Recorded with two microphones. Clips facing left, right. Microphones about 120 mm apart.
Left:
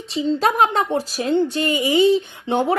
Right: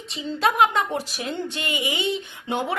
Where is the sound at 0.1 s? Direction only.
35° left (ahead or behind).